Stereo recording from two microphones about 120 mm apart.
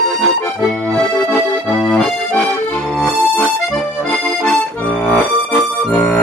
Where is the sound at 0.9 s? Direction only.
5° left (ahead or behind).